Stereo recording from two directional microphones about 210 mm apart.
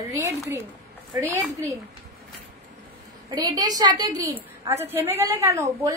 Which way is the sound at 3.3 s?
20° right (ahead or behind).